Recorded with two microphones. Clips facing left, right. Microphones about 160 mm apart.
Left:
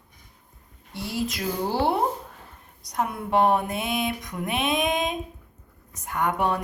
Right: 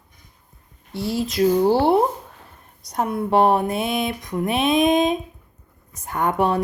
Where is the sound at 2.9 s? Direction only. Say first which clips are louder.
Right 5 dB; 35° right (ahead or behind).